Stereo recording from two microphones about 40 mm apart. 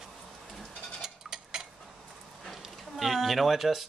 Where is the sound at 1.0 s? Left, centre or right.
Centre.